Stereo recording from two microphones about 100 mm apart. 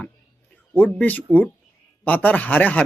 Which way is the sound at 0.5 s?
15° left (ahead or behind).